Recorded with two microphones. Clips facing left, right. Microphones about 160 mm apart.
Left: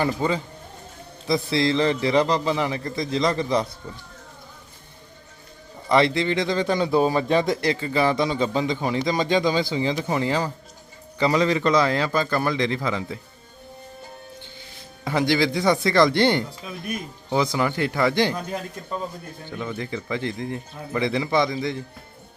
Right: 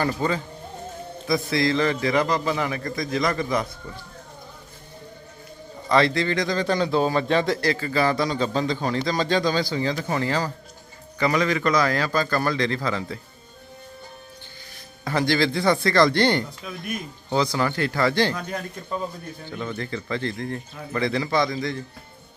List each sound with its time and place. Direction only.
0.0 s a man's voice: 20° left (ahead or behind)
5.9 s a man's voice: 20° left (ahead or behind)
11.2 s a man's voice: 25° left (ahead or behind)
15.0 s a man's voice: 15° left (ahead or behind)
19.5 s a man's voice: 15° left (ahead or behind)